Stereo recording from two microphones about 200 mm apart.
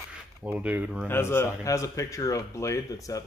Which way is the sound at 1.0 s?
10° left (ahead or behind).